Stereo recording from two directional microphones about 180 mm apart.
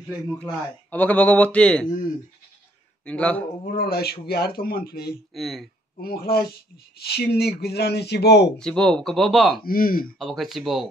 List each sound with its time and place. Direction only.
0.4 s speech: 5° left (ahead or behind)
3.1 s speech: 5° left (ahead or behind)
3.6 s speech: 55° left (ahead or behind)
5.3 s speech: centre (ahead or behind)
5.9 s speech: 60° left (ahead or behind)
8.5 s speech: 5° left (ahead or behind)
9.6 s speech: 55° left (ahead or behind)
10.1 s speech: centre (ahead or behind)